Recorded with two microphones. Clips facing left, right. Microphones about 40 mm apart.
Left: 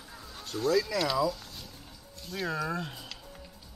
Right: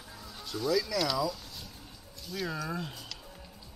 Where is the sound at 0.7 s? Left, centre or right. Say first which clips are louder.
Left 2 dB; centre.